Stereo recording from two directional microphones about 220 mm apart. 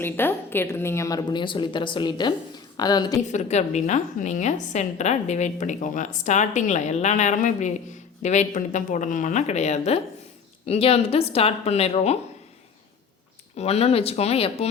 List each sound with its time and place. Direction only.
0.0 s a woman's voice: 10° left (ahead or behind)
3.3 s a woman's voice: 30° left (ahead or behind)
13.6 s a woman's voice: 30° left (ahead or behind)